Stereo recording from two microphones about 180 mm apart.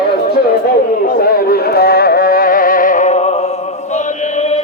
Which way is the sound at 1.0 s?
55° left (ahead or behind).